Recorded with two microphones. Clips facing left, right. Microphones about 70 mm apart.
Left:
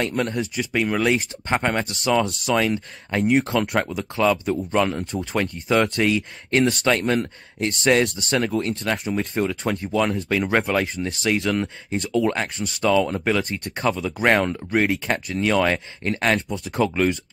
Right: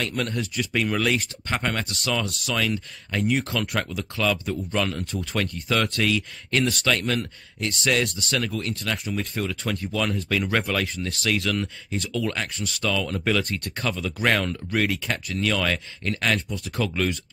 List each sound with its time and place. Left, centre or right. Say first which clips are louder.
0.0 s speech: left 4 dB; left
4.0 s speech: left 5 dB; left
5.1 s speech: left 3 dB; centre
13.4 s speech: left 2 dB; centre
13.7 s speech: left 6 dB; left